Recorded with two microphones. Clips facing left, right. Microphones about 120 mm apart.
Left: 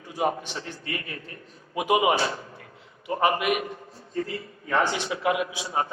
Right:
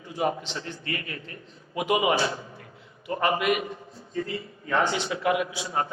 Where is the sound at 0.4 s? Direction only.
20° right (ahead or behind).